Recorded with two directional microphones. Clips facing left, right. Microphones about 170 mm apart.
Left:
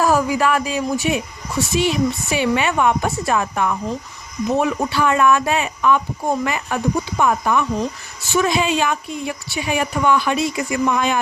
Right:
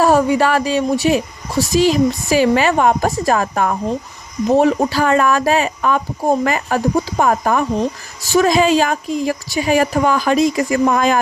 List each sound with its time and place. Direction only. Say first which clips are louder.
0.0 s a woman's voice: right 4 dB; 30° right (ahead or behind); by 3.8 s 45° right (ahead or behind)
4.4 s a woman's voice: right 6 dB; 35° right (ahead or behind)